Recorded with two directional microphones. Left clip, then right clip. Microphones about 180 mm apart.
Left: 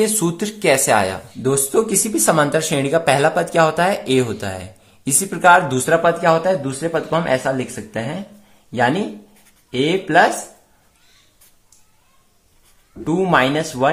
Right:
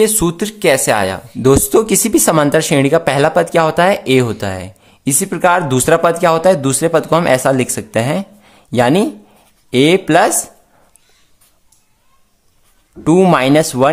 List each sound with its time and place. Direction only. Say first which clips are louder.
0.0 s speech: right 5 dB; 25° right (ahead or behind)
1.4 s speech: right 7 dB; 40° right (ahead or behind)
13.0 s speech: right 5 dB; 55° right (ahead or behind)